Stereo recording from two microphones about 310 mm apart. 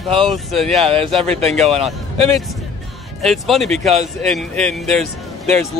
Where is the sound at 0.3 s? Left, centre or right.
Centre.